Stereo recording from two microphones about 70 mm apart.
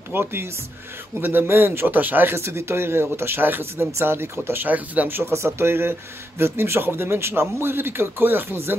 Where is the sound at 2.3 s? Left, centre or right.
Right.